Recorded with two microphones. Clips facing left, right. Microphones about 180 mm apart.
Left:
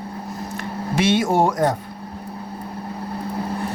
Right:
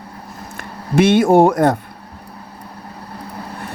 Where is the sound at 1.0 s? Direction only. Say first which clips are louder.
Right 7 dB; 55° right (ahead or behind).